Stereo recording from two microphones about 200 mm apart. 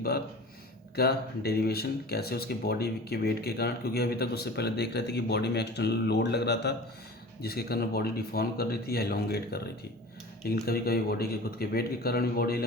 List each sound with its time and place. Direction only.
0.9 s speech: 50° left (ahead or behind)